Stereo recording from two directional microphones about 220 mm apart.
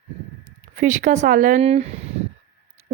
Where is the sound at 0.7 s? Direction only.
35° right (ahead or behind).